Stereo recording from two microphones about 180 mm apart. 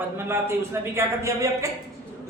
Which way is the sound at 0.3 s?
15° right (ahead or behind).